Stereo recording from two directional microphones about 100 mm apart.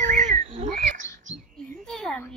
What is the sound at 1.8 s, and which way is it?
Speech, 5° left (ahead or behind).